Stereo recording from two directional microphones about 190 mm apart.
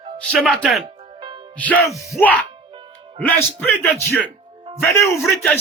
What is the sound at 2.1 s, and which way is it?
Speech, 10° left (ahead or behind).